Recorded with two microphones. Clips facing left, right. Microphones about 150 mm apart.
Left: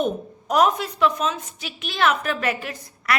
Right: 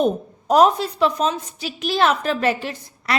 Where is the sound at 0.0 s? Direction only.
30° right (ahead or behind).